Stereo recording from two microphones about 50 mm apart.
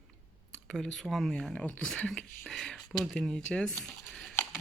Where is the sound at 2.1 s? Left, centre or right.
Centre.